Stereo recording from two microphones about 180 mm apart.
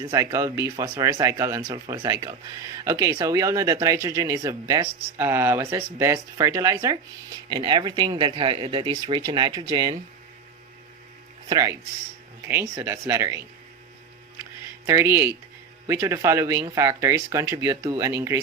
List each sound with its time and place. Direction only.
0.0 s speech: 20° right (ahead or behind)
11.4 s speech: 20° right (ahead or behind)
14.8 s speech: 15° right (ahead or behind)